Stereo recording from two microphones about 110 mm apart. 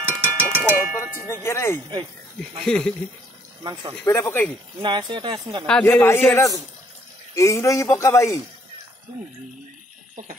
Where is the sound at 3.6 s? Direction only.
40° right (ahead or behind).